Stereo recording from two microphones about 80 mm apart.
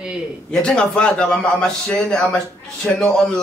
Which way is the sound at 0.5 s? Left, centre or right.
Centre.